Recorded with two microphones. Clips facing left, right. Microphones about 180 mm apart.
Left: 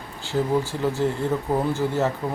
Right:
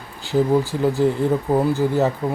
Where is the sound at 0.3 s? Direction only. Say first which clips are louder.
Right 5 dB; 15° right (ahead or behind).